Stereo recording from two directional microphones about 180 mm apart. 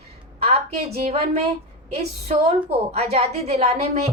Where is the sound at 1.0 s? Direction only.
35° right (ahead or behind).